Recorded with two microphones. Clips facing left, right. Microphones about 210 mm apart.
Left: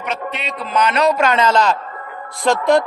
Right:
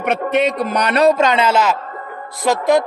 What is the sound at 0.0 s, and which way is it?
Speech, 55° right (ahead or behind).